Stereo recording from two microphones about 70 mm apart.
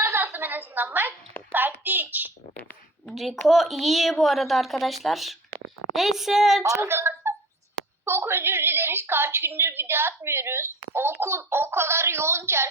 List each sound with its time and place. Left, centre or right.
0.0 s a sound: right
1.5 s a child's voice: right
3.1 s a woman's voice: centre
6.6 s a woman's voice: right